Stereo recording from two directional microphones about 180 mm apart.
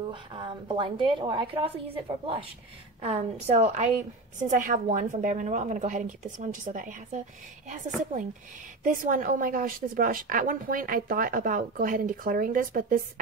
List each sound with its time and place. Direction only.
0.1 s a woman's voice: 25° right (ahead or behind); by 13.0 s 50° right (ahead or behind)